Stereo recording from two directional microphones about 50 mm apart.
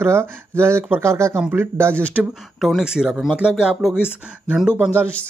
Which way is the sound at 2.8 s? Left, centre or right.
Centre.